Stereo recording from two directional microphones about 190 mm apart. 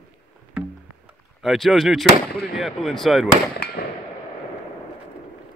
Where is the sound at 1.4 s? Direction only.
Centre (ahead or behind).